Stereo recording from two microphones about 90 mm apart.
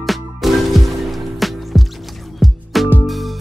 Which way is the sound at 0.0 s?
Centre (ahead or behind).